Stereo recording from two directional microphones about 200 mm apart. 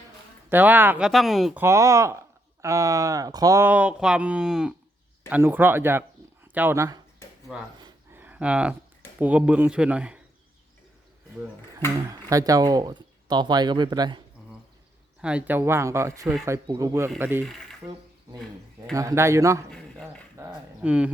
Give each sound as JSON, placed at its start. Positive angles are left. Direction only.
{"t": 0.5, "sound": "speech", "side_deg": -10}
{"t": 1.6, "sound": "speech", "side_deg": -15}
{"t": 8.1, "sound": "a sound", "side_deg": -10}
{"t": 9.1, "sound": "speech", "side_deg": -5}
{"t": 11.9, "sound": "speech", "side_deg": -15}
{"t": 15.2, "sound": "speech", "side_deg": -5}
{"t": 17.4, "sound": "speech", "side_deg": 0}
{"t": 18.9, "sound": "speech", "side_deg": -15}
{"t": 19.7, "sound": "speech", "side_deg": 5}